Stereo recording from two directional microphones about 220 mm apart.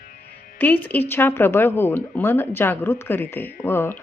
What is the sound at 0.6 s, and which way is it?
A woman's voice, 10° left (ahead or behind).